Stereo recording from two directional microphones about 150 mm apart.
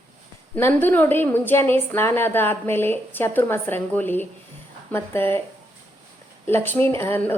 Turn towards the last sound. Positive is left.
turn(degrees=15)  # may be behind; listen again after turning